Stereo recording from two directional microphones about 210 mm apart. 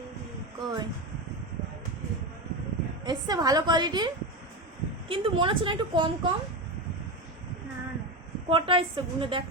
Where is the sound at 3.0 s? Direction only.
20° right (ahead or behind).